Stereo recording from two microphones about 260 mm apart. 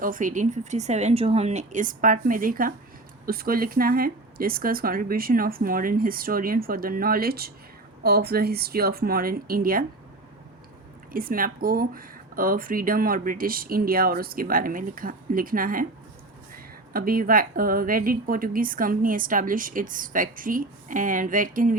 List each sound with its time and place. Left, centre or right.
0.0 s speech: right
11.1 s speech: right
16.9 s speech: right